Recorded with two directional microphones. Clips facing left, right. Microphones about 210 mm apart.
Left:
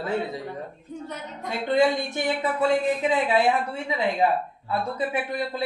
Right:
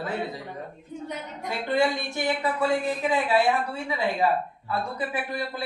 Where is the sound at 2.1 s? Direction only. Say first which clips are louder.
Left 1 dB; 20° left (ahead or behind).